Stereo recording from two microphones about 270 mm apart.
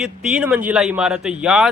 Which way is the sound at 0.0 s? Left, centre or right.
Centre.